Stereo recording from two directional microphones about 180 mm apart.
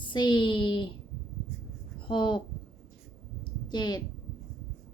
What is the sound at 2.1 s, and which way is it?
Speech, 25° left (ahead or behind).